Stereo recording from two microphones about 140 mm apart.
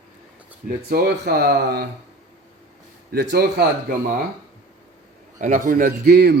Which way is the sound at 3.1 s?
90° right.